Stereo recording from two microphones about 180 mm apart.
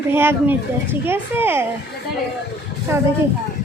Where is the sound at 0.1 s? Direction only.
10° right (ahead or behind).